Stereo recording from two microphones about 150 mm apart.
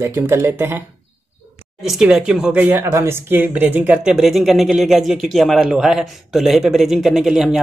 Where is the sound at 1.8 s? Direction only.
Centre (ahead or behind).